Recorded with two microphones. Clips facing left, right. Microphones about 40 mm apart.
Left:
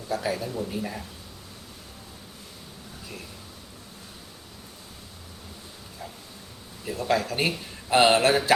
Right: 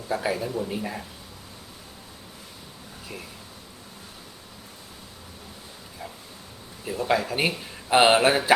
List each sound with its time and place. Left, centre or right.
0.2 s speech: centre
6.8 s speech: centre
7.9 s a sound: centre